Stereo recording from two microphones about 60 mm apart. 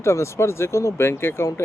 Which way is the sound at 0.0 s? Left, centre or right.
Left.